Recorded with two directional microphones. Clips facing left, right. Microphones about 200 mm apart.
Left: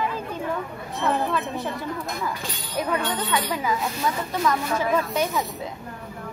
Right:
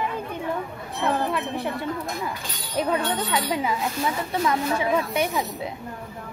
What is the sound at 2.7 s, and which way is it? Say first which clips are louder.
Speech: right 2 dB; 25° right (ahead or behind).